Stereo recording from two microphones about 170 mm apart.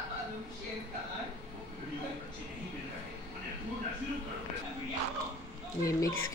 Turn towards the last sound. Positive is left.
turn(degrees=20)  # may be behind; listen again after turning